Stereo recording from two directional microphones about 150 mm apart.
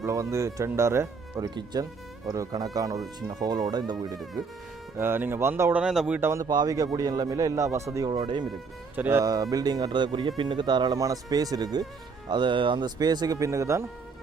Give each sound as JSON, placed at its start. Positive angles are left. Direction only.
{"t": 0.0, "sound": "speech", "side_deg": -20}
{"t": 1.5, "sound": "speech", "side_deg": -30}
{"t": 4.9, "sound": "speech", "side_deg": -15}
{"t": 5.8, "sound": "speech", "side_deg": -5}
{"t": 8.1, "sound": "speech", "side_deg": -35}
{"t": 9.0, "sound": "speech", "side_deg": -15}